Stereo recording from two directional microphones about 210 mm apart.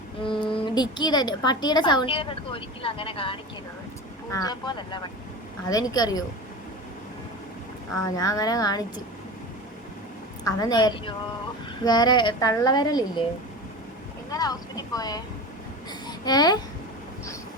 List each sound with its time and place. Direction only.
0.2 s a woman's voice: 25° left (ahead or behind)
8.0 s speech: 15° left (ahead or behind)
10.4 s a woman's voice: 20° left (ahead or behind)
14.3 s speech: 20° left (ahead or behind)
15.9 s babbling: 20° left (ahead or behind)